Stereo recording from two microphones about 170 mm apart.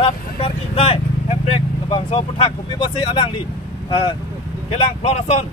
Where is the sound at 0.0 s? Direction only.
35° left (ahead or behind).